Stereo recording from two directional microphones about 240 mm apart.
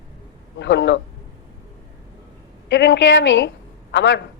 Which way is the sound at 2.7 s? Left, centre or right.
Left.